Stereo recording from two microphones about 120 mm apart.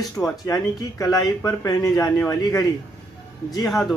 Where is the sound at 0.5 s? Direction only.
30° left (ahead or behind).